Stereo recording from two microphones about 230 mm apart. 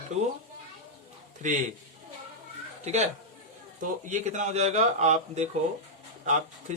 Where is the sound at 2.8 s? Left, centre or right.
Right.